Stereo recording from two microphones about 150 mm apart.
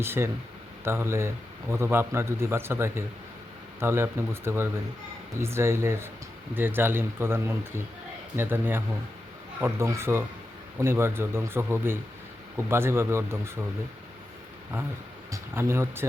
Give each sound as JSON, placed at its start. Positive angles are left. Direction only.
{"t": 0.0, "sound": "a man's voice", "side_deg": -15}
{"t": 15.3, "sound": "speech", "side_deg": -20}